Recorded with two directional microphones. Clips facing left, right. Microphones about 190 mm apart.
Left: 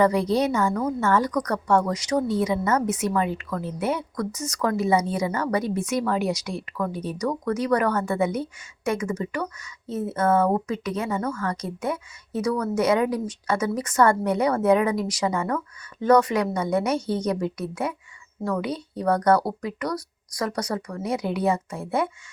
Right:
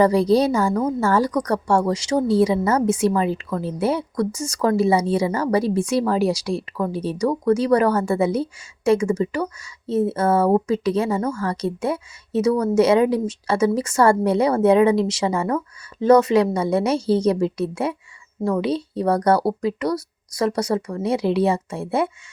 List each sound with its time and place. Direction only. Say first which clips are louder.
0.0 s a woman's voice: right 4 dB; 30° right (ahead or behind)